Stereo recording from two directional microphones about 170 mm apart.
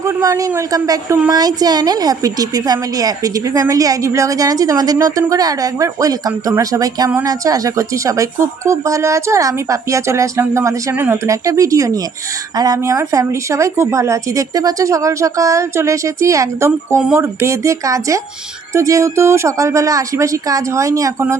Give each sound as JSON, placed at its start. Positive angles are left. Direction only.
{"t": 0.0, "sound": "a woman's voice", "side_deg": -20}